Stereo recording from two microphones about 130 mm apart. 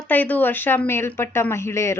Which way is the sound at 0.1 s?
15° left (ahead or behind).